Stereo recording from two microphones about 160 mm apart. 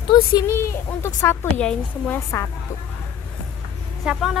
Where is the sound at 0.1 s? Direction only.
20° left (ahead or behind).